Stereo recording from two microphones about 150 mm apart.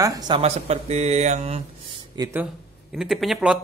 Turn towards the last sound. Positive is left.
turn(degrees=-5)  # may be behind; listen again after turning